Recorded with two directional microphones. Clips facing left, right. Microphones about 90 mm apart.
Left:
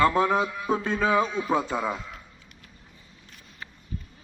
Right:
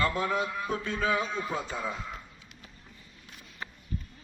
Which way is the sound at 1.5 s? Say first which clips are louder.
Left 7 dB; 70° left (ahead or behind).